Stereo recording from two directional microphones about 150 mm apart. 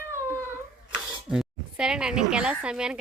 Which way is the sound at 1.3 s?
5° right (ahead or behind).